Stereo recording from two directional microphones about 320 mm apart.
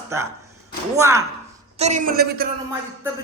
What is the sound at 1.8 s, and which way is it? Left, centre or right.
Speech, right.